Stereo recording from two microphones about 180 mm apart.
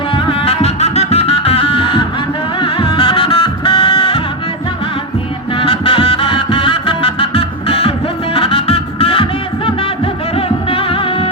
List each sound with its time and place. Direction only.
0.1 s music: 30° left (ahead or behind)
5.5 s music: 30° left (ahead or behind)
10.3 s music: 30° left (ahead or behind)